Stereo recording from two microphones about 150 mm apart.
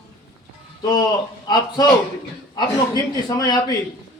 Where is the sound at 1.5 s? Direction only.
30° left (ahead or behind).